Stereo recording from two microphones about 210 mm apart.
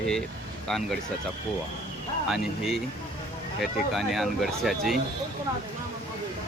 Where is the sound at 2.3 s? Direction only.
Centre (ahead or behind).